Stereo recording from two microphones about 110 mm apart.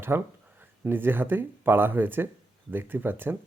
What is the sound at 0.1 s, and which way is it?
Speech, 20° right (ahead or behind).